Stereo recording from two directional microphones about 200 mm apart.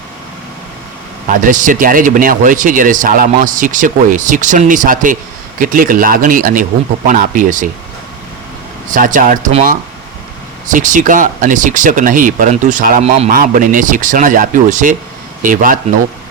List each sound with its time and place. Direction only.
1.4 s speech: 40° right (ahead or behind)
8.9 s speech: 40° right (ahead or behind)